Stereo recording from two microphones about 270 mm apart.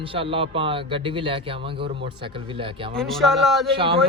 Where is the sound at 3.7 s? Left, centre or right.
Centre.